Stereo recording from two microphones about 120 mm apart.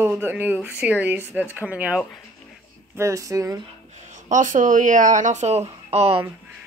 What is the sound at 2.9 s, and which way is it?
Speech, 25° right (ahead or behind).